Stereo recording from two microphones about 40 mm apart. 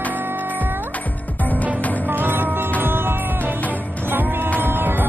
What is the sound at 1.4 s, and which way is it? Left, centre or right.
Music, left.